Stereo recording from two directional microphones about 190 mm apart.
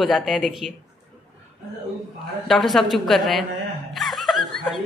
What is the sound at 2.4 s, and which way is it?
A man's voice, centre (ahead or behind).